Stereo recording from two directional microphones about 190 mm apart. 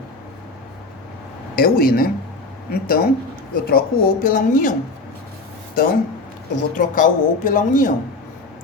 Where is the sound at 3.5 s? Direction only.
50° left (ahead or behind).